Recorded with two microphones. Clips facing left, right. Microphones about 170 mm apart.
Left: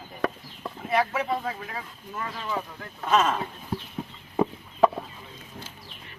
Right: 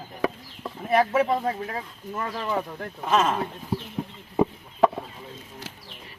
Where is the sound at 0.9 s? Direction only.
45° right (ahead or behind).